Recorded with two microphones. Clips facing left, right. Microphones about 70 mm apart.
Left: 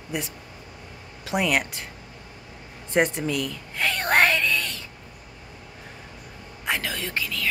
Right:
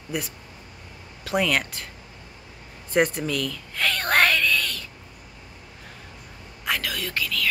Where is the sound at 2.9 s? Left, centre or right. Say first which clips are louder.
Even; left.